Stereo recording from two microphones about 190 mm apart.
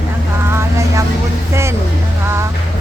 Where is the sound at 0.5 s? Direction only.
15° right (ahead or behind).